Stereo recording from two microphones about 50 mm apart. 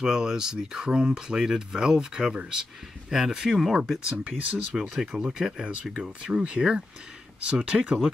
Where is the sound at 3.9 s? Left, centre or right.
Right.